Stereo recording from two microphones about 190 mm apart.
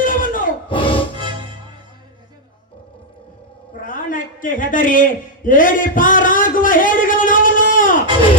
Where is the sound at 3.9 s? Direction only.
45° left (ahead or behind).